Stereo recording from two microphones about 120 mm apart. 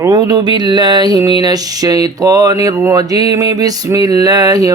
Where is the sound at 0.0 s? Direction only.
30° right (ahead or behind).